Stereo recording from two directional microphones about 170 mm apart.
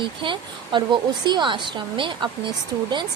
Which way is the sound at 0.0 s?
30° right (ahead or behind).